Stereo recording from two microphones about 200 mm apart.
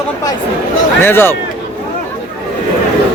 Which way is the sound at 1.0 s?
10° left (ahead or behind).